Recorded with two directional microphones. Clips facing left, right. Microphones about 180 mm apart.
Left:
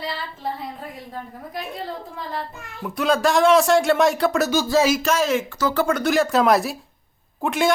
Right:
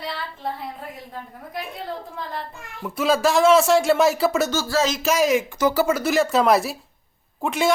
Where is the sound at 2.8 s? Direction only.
Centre (ahead or behind).